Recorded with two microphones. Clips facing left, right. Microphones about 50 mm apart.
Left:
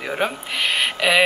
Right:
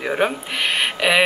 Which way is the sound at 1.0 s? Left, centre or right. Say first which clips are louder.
Even; centre.